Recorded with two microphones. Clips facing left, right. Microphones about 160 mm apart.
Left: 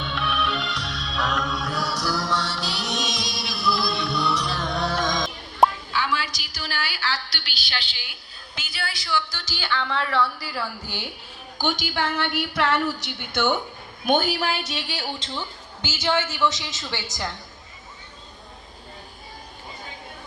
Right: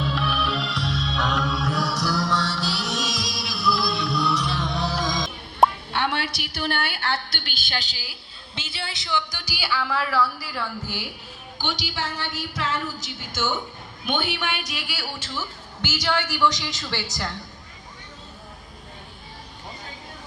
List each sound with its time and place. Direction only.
0.0 s music: centre (ahead or behind)
5.9 s a woman's voice: 65° right (ahead or behind); by 10.7 s centre (ahead or behind)
10.8 s a woman's voice: 20° left (ahead or behind)
11.5 s a woman's voice: 50° left (ahead or behind)
14.0 s a woman's voice: 45° left (ahead or behind)
14.6 s a woman's voice: 25° left (ahead or behind)